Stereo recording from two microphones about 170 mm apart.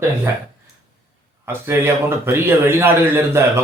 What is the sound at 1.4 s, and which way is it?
Speech, 15° right (ahead or behind).